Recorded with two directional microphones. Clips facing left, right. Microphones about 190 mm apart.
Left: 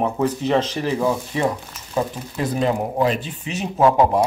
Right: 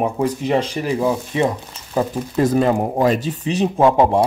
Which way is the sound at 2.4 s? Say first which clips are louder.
Right 5 dB; 45° right (ahead or behind).